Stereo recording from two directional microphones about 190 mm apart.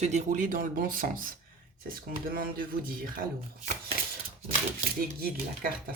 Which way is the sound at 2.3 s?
50° right (ahead or behind).